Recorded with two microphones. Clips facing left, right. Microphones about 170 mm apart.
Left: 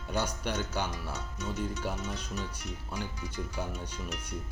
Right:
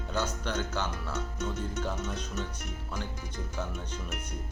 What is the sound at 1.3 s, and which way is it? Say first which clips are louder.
Speech: right 1 dB; 55° right (ahead or behind).